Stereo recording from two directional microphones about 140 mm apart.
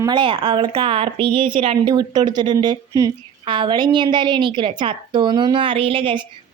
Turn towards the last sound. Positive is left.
turn(degrees=-40)  # may be behind; listen again after turning